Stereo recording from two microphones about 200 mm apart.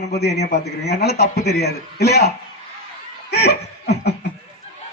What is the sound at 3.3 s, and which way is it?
Laughter, 55° left (ahead or behind).